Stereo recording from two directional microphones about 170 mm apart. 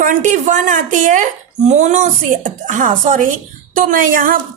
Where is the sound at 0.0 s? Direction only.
45° right (ahead or behind).